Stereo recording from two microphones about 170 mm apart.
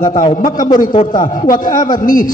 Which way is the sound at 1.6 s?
50° left (ahead or behind).